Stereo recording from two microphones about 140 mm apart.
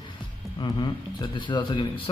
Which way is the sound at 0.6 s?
35° left (ahead or behind).